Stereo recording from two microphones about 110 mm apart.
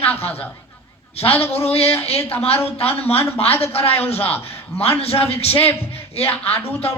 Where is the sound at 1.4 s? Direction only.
65° left (ahead or behind).